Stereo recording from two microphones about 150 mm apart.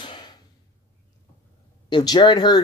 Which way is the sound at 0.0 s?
30° left (ahead or behind).